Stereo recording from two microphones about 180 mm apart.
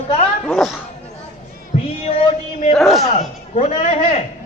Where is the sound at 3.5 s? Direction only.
40° left (ahead or behind).